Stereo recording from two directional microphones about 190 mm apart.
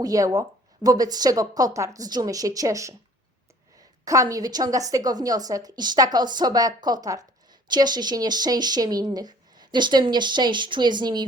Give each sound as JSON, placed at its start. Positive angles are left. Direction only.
{"t": 0.0, "sound": "speech", "side_deg": -20}
{"t": 4.0, "sound": "speech", "side_deg": -15}